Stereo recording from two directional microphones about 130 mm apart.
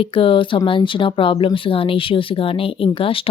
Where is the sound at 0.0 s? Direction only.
45° left (ahead or behind).